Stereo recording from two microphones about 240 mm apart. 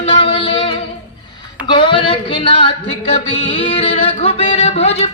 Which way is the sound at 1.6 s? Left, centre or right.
Centre.